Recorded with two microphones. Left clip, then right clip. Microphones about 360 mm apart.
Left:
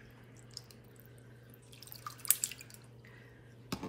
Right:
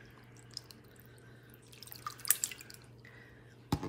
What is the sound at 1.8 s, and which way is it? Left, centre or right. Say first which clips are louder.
Drip: right 3 dB; centre.